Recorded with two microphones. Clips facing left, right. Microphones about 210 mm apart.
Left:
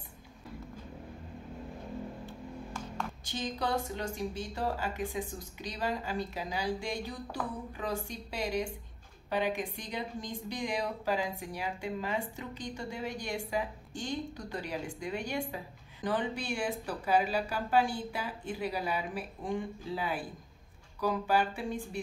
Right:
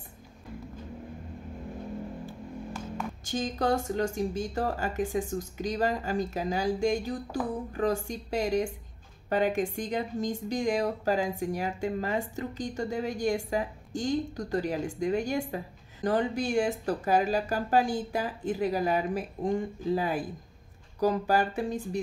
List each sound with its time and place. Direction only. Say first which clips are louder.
3.3 s a woman's voice: right 7 dB; 45° right (ahead or behind)